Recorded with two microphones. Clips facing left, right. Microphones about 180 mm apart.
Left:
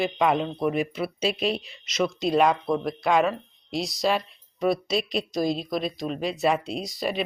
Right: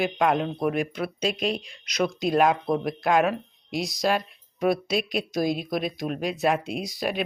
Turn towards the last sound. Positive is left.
turn(degrees=0)  # may be behind; listen again after turning